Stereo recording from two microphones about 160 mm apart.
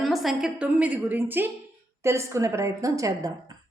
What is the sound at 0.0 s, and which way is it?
A woman's voice, centre (ahead or behind).